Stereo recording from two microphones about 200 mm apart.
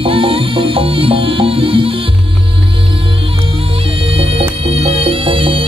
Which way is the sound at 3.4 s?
25° right (ahead or behind).